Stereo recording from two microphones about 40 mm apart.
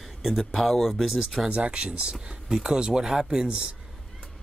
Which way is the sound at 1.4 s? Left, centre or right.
Right.